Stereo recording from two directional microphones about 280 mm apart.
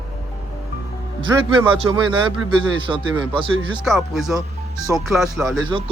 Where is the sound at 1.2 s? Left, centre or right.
Centre.